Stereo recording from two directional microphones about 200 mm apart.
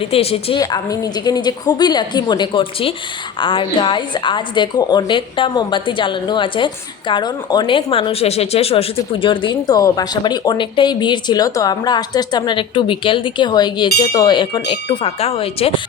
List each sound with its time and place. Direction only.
0.0 s speech: 30° left (ahead or behind)
0.6 s speech: 20° left (ahead or behind)